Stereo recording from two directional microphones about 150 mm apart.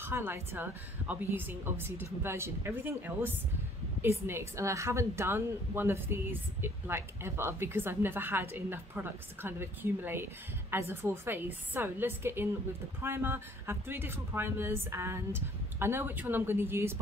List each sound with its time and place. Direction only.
0.0 s a woman's voice: 15° right (ahead or behind)